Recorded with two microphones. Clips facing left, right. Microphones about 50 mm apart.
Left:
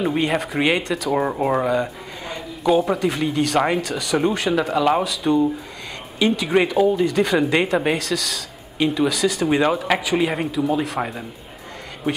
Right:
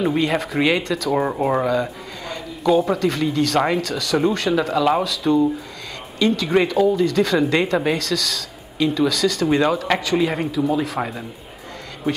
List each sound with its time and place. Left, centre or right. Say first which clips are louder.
0.0 s speech: right 1 dB; centre